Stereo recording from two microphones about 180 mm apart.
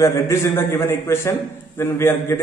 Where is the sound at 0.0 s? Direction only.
15° left (ahead or behind).